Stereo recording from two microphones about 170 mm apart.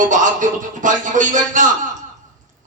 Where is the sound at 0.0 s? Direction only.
50° right (ahead or behind).